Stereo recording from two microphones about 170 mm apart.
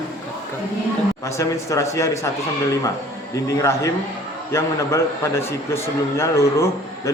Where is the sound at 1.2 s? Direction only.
15° left (ahead or behind).